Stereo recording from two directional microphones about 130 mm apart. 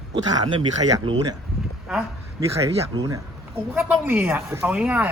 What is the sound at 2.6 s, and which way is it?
Speech, 25° right (ahead or behind).